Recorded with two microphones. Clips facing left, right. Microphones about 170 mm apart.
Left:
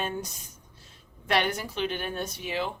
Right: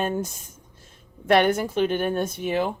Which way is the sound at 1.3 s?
50° right (ahead or behind).